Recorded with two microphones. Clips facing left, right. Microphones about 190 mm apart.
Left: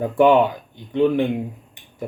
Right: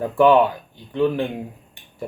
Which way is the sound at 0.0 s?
20° left (ahead or behind).